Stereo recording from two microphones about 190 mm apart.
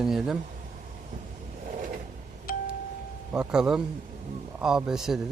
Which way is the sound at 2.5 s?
50° left (ahead or behind).